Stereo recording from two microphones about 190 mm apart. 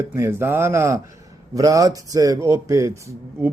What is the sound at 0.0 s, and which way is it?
Speech, 15° right (ahead or behind).